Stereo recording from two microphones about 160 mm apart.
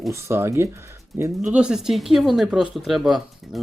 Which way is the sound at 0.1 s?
15° right (ahead or behind).